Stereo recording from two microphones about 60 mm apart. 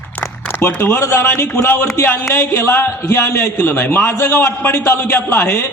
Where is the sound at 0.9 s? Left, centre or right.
Left.